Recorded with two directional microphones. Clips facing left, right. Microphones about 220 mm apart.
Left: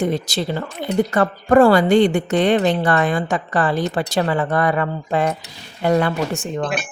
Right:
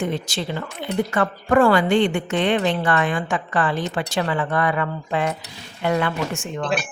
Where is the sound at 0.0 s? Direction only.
40° left (ahead or behind).